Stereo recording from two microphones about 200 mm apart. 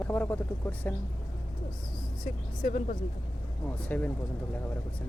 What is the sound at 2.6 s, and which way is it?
Speech, 40° left (ahead or behind).